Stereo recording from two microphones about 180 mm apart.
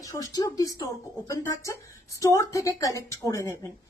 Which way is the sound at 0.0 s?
20° left (ahead or behind).